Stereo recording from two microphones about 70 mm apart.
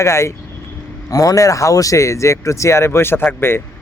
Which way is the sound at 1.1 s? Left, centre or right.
Left.